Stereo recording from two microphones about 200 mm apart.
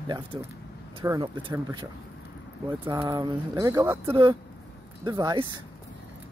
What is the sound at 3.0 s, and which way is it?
Speech, 20° right (ahead or behind).